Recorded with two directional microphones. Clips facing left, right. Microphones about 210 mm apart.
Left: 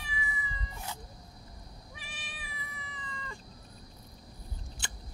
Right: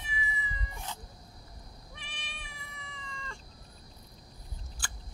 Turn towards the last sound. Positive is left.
turn(degrees=20)  # may be behind; listen again after turning